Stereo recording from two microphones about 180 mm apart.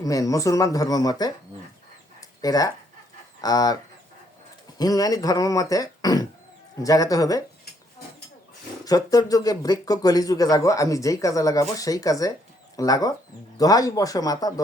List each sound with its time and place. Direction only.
0.0 s speech: 20° left (ahead or behind)
2.4 s speech: 20° left (ahead or behind)
4.8 s speech: 20° left (ahead or behind)
8.8 s speech: 20° left (ahead or behind)